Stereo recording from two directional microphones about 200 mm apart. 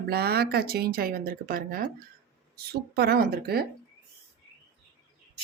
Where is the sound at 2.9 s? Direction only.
50° right (ahead or behind).